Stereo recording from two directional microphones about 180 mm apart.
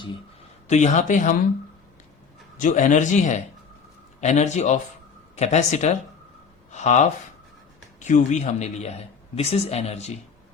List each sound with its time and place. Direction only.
0.7 s speech: 40° left (ahead or behind)
2.6 s a man's voice: 45° left (ahead or behind)